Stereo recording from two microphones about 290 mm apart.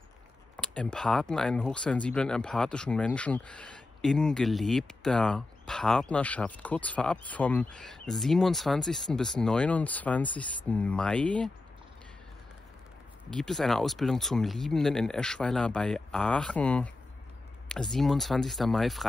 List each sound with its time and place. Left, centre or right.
0.6 s speech: centre
13.3 s speech: centre